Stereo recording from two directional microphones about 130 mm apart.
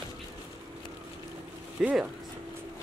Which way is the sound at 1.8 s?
10° right (ahead or behind).